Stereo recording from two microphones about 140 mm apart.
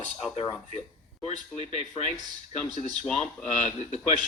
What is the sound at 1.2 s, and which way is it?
Speech, 50° left (ahead or behind).